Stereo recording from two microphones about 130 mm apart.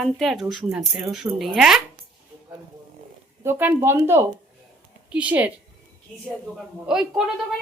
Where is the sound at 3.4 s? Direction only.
15° right (ahead or behind).